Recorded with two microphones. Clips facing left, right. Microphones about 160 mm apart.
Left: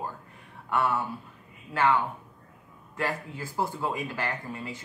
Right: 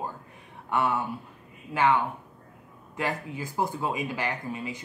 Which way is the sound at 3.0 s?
15° right (ahead or behind).